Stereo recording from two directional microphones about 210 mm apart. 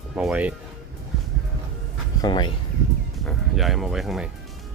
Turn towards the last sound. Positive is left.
turn(degrees=0)  # may be behind; listen again after turning